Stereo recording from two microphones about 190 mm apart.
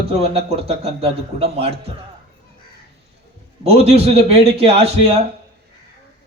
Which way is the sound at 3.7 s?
30° right (ahead or behind).